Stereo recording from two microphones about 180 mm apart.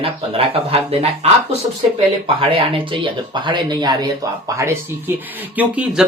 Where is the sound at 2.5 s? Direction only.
30° right (ahead or behind).